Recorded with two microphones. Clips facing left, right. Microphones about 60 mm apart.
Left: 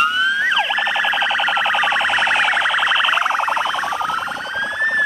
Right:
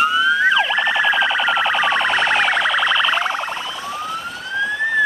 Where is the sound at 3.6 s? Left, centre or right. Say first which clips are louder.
Left 8 dB; left.